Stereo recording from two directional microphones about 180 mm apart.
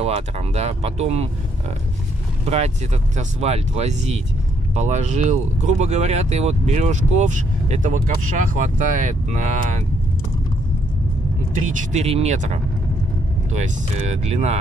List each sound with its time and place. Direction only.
0.0 s speech: 35° right (ahead or behind)
2.4 s speech: 40° right (ahead or behind)
11.9 s speech: 35° right (ahead or behind)